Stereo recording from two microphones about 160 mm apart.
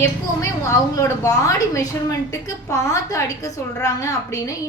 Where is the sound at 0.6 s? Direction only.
20° left (ahead or behind).